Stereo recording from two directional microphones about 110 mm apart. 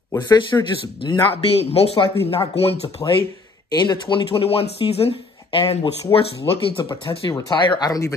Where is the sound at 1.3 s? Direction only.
65° left (ahead or behind).